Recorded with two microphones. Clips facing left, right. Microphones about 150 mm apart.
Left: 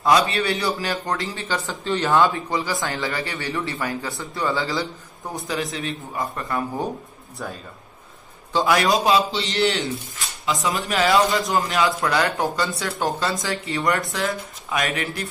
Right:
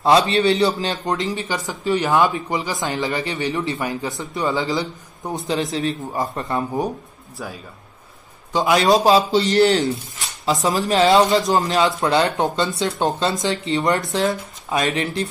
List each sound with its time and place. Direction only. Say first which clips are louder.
0.0 s speech: right 4 dB; 25° right (ahead or behind)
5.7 s a man's voice: right 6 dB; 35° right (ahead or behind)
6.3 s speech: right 3 dB; 20° right (ahead or behind)
8.5 s speech: right 3 dB; 20° right (ahead or behind)
9.3 s a man's voice: right 7 dB; 45° right (ahead or behind)
10.9 s speech: right 4 dB; 25° right (ahead or behind)